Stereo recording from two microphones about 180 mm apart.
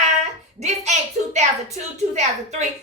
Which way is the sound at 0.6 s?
40° right (ahead or behind).